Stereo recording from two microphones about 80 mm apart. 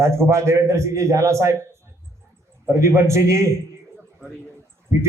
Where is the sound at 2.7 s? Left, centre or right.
Right.